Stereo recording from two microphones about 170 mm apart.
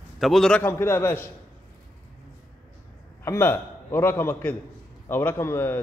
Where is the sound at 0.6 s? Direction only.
15° left (ahead or behind).